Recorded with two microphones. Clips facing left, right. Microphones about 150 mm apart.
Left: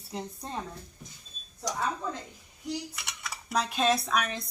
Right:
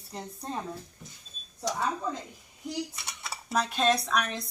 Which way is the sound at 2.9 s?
25° right (ahead or behind).